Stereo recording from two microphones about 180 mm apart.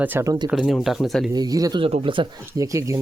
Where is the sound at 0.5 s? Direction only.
Centre (ahead or behind).